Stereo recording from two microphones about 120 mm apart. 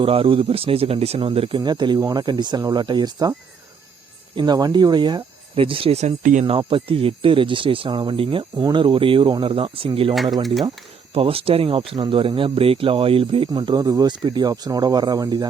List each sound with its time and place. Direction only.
0.0 s speech: 50° right (ahead or behind)
1.6 s speech: 40° right (ahead or behind)
4.4 s speech: 35° right (ahead or behind); by 6.4 s 80° right
6.5 s speech: 45° right (ahead or behind)
8.5 s speech: 35° right (ahead or behind)
10.4 s speech: centre (ahead or behind)
11.1 s speech: 50° right (ahead or behind)
13.8 s speech: 30° right (ahead or behind)